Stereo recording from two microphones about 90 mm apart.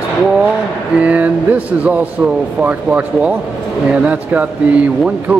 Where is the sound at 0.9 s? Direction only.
15° right (ahead or behind).